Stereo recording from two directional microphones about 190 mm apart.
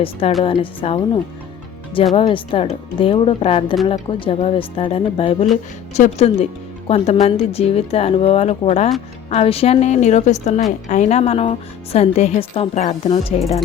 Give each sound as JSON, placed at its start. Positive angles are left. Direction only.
{"t": 0.4, "sound": "a woman's voice", "side_deg": 30}